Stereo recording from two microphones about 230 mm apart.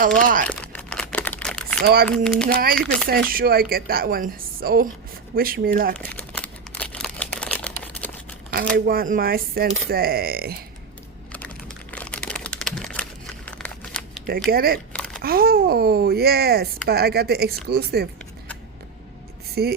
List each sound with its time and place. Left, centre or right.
0.0 s speech: right
0.4 s crumpling: centre
1.8 s speech: right
2.0 s speech: centre
2.5 s speech: right
6.0 s crumpling: centre
7.8 s a sound: centre
8.7 s speech: right
11.3 s typing: centre
14.3 s speech: right
14.9 s a sound: centre
15.2 s speech: right
19.6 s speech: right